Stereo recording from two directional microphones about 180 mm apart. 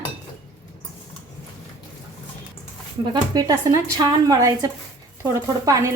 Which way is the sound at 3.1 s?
20° right (ahead or behind).